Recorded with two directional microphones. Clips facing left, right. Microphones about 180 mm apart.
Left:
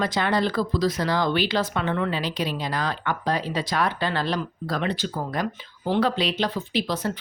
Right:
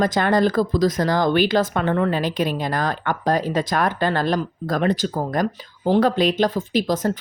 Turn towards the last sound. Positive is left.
turn(degrees=-45)  # may be behind; listen again after turning